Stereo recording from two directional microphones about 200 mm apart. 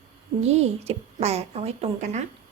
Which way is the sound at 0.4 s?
30° right (ahead or behind).